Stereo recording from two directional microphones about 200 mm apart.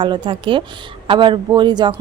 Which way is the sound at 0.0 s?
25° right (ahead or behind).